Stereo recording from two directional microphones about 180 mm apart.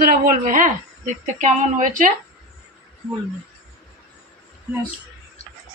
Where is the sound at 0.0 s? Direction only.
50° right (ahead or behind).